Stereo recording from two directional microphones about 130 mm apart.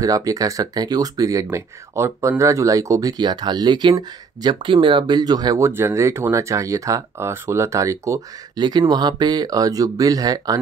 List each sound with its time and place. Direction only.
0.0 s speech: 25° right (ahead or behind)
5.7 s speech: 20° right (ahead or behind)